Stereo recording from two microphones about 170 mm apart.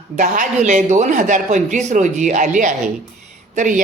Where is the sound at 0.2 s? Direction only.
45° right (ahead or behind).